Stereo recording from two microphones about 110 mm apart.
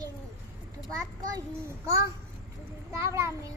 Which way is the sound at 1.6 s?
25° right (ahead or behind).